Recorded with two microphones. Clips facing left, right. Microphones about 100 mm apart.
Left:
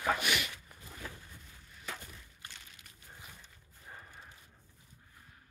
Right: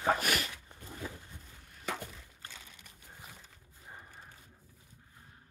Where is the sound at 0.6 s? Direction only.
30° right (ahead or behind).